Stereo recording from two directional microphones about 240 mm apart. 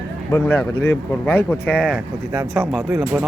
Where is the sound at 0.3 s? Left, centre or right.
Centre.